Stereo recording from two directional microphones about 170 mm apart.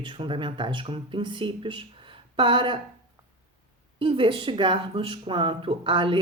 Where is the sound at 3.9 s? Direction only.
30° right (ahead or behind).